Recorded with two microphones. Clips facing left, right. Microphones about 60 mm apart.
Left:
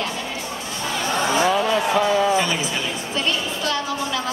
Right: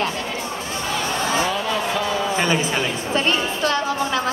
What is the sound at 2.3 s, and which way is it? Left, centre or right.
Music, right.